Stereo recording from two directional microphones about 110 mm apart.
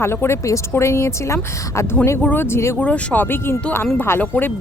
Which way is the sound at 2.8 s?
10° left (ahead or behind).